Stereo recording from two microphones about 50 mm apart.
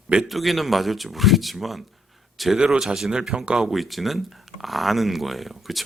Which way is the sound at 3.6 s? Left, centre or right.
Centre.